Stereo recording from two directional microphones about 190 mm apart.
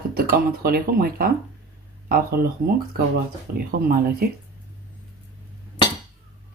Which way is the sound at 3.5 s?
50° right (ahead or behind).